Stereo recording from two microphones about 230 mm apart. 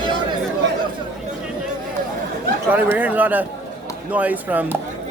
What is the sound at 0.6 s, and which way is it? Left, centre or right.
Chatter, right.